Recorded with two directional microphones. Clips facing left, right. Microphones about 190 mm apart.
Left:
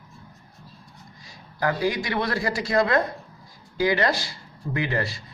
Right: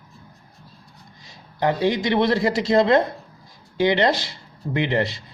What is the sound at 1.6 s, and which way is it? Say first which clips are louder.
Speech: right 4 dB; 25° right (ahead or behind).